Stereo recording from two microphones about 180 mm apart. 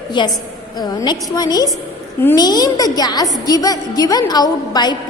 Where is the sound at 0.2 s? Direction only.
25° left (ahead or behind).